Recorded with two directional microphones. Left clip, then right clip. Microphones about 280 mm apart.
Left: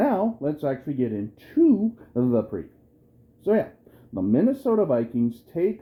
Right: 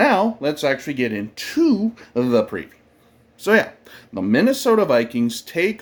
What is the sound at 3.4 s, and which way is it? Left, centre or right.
Speech, centre.